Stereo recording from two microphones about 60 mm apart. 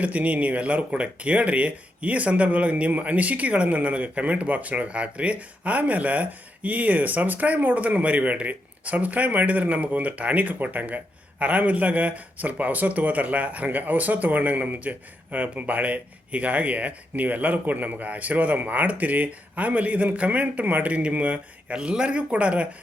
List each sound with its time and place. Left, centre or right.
0.0 s speech: right